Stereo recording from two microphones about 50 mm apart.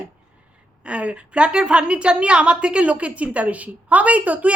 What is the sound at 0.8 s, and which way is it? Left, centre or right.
A woman's voice, right.